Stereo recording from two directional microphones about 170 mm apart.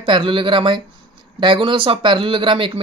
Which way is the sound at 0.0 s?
30° right (ahead or behind).